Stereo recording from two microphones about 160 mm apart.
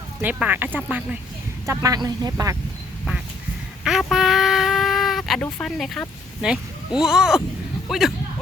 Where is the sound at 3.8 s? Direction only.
Centre (ahead or behind).